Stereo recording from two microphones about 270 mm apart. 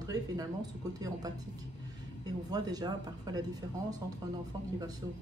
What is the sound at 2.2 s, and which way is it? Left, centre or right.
Speech, centre.